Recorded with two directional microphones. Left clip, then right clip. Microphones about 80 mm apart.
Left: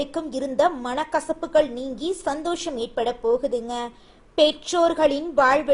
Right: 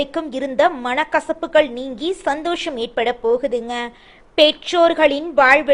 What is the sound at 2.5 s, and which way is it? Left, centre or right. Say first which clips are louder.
A woman's voice: right 5 dB; centre.